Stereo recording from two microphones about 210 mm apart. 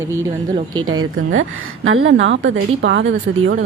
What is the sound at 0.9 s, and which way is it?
A woman's voice, 80° right.